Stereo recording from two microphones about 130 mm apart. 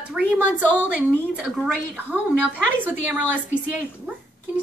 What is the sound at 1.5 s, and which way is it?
Speech, centre (ahead or behind).